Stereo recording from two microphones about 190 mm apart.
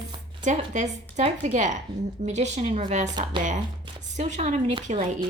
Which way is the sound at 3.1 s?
20° right (ahead or behind).